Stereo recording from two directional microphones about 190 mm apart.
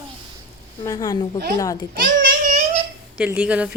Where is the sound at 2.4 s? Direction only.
35° right (ahead or behind).